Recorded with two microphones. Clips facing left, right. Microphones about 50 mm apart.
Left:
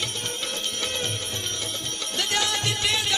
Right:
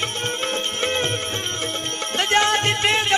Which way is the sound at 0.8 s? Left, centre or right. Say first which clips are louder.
Right 8 dB; right.